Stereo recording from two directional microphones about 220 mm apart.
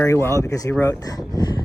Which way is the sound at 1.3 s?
20° left (ahead or behind).